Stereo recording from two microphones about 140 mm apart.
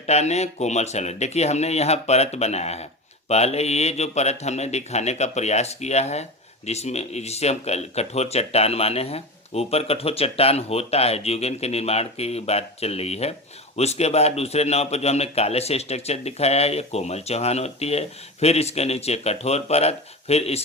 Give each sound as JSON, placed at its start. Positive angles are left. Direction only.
{"t": 0.0, "sound": "a man's voice", "side_deg": 50}